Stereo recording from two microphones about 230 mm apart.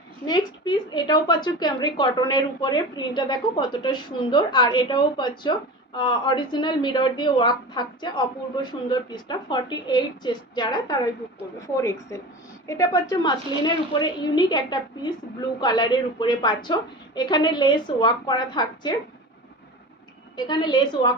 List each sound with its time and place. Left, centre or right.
0.3 s a woman's voice: centre
20.3 s a woman's voice: centre